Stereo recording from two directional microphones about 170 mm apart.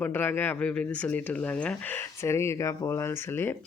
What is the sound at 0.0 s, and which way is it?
Speech, 10° left (ahead or behind).